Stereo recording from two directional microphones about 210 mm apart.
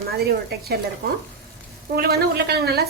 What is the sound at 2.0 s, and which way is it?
Speech, 50° right (ahead or behind).